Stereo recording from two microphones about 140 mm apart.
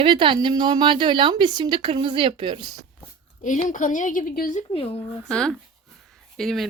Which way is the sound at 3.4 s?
65° left (ahead or behind).